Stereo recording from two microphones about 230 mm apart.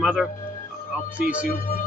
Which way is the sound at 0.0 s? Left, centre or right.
Centre.